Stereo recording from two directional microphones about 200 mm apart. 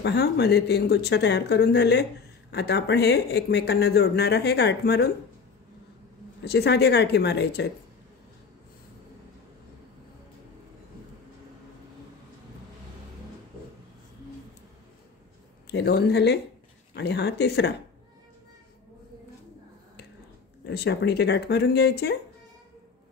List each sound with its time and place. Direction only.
0.0 s speech: 55° left (ahead or behind)
6.4 s speech: 55° left (ahead or behind)
15.6 s speech: 55° left (ahead or behind)
20.6 s speech: 55° left (ahead or behind)